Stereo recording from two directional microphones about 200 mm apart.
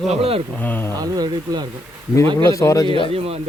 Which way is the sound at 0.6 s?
10° left (ahead or behind).